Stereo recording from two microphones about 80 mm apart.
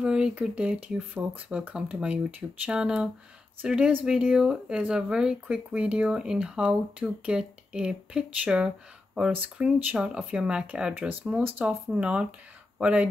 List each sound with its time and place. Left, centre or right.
0.0 s speech: centre